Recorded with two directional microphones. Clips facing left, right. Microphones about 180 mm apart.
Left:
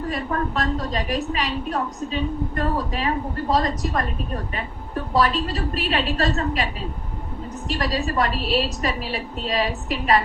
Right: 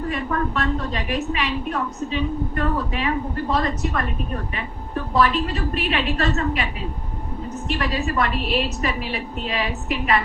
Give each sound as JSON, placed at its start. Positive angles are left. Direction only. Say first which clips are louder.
{"t": 0.1, "sound": "a woman's voice", "louder": "right 1 dB", "side_deg": 35}
{"t": 7.8, "sound": "a woman's voice", "louder": "left 1 dB", "side_deg": 35}